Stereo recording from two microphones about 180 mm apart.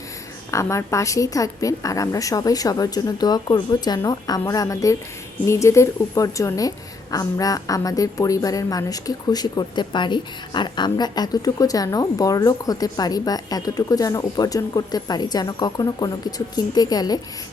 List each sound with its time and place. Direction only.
0.5 s a woman's voice: 15° left (ahead or behind)